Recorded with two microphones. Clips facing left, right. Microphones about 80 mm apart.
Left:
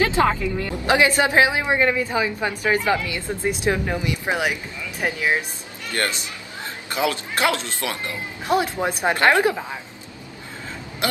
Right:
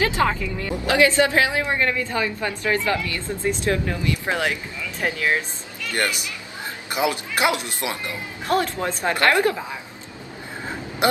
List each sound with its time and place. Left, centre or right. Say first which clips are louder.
0.0 s a woman's voice: left 2 dB; left
6.9 s speech: even; centre
8.5 s a woman's voice: left 1 dB; centre